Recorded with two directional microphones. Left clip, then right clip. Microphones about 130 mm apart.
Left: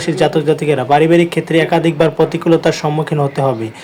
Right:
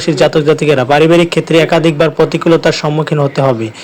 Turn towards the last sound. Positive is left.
turn(degrees=-15)  # may be behind; listen again after turning